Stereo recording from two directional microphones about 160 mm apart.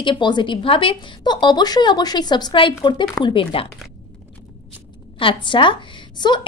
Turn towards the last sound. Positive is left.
turn(degrees=25)  # may be behind; listen again after turning